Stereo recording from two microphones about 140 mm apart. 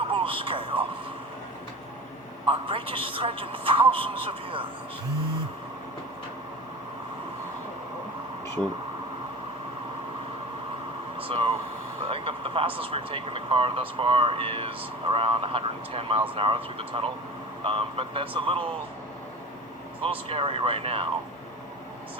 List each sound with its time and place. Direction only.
0.0 s a sound: 40° right (ahead or behind)
2.5 s speech: 40° right (ahead or behind)
11.2 s speech: 40° right (ahead or behind)
20.0 s speech: 40° right (ahead or behind)